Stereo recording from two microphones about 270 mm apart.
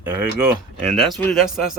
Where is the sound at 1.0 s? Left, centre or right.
Centre.